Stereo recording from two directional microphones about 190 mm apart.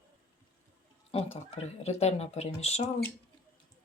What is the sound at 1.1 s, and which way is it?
Speech, 30° left (ahead or behind).